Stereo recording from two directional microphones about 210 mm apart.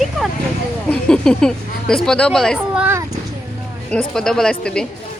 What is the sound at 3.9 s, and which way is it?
Speech, centre (ahead or behind).